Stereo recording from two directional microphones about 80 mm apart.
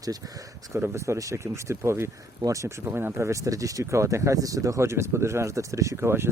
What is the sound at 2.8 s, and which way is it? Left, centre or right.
Speech, right.